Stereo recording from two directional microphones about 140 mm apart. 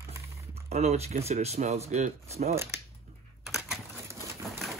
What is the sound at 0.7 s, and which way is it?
Speech, 55° right (ahead or behind).